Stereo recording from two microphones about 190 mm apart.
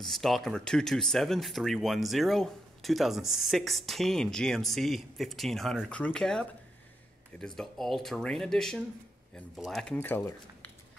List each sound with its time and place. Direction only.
0.0 s speech: centre (ahead or behind)
9.9 s speech: 10° left (ahead or behind)